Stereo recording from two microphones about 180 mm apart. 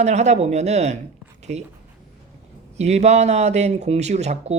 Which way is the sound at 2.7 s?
40° right (ahead or behind).